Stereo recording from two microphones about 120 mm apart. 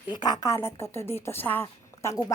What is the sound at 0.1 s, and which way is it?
A woman's voice, 35° left (ahead or behind).